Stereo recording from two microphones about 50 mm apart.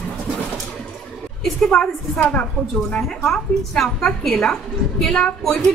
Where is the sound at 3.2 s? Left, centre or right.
Centre.